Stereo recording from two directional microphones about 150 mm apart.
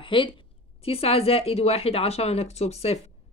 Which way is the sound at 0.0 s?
35° left (ahead or behind).